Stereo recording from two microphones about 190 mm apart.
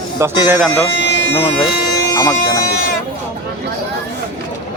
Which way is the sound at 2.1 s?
15° left (ahead or behind).